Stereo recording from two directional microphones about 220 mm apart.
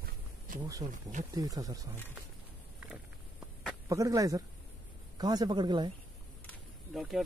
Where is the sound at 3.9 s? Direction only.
15° right (ahead or behind).